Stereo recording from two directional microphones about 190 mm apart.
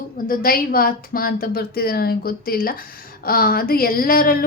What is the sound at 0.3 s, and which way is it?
Speech, 50° left (ahead or behind).